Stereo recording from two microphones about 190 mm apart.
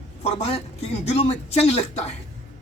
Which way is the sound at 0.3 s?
30° left (ahead or behind).